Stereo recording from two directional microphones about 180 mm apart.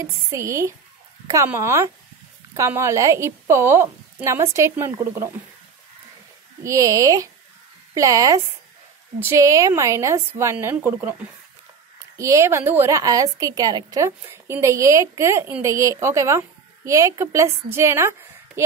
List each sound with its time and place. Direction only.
0.0 s a woman's voice: 15° right (ahead or behind)
6.6 s a woman's voice: 20° right (ahead or behind)
12.2 s a woman's voice: 15° right (ahead or behind)